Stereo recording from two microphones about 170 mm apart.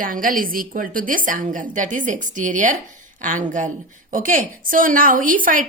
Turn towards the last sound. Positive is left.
turn(degrees=-55)  # may be behind; listen again after turning